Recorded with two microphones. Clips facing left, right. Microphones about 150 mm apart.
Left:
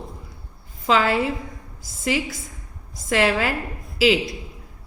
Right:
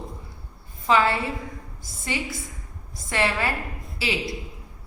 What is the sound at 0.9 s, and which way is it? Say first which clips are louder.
Speech: left 1 dB; 90° left.